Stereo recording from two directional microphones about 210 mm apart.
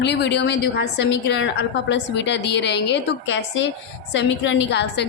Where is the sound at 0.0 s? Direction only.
55° left (ahead or behind).